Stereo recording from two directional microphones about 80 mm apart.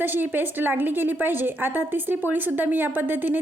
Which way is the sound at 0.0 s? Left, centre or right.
Right.